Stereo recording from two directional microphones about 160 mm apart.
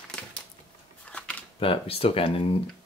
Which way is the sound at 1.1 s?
5° left (ahead or behind).